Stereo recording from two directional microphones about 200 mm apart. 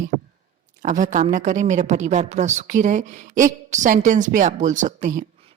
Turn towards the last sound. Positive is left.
turn(degrees=-40)  # may be behind; listen again after turning